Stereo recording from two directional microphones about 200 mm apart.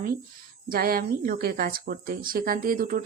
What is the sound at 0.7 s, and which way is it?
A woman's voice, 45° right (ahead or behind).